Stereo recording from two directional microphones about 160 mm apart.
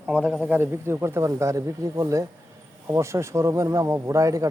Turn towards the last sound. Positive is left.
turn(degrees=-20)  # may be behind; listen again after turning